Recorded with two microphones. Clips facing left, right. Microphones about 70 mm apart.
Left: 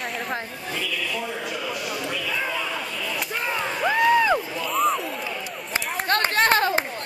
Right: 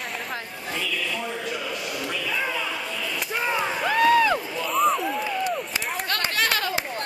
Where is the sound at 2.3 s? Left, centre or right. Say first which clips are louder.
Right 1 dB; centre.